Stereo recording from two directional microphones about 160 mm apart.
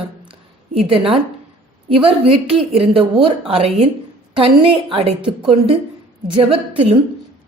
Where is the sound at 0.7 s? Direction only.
35° right (ahead or behind).